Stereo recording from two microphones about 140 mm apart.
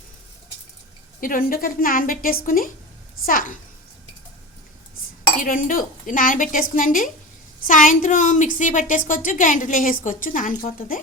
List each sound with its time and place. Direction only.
1.2 s a woman's voice: 85° left
5.4 s a woman's voice: 75° left (ahead or behind)